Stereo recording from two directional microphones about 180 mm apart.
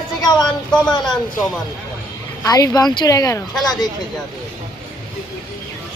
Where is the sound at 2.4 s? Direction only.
20° left (ahead or behind).